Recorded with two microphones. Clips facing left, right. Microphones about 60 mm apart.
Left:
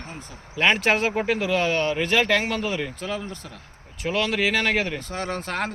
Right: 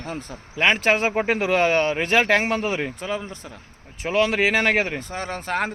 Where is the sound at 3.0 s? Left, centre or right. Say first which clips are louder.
Right 2 dB; centre.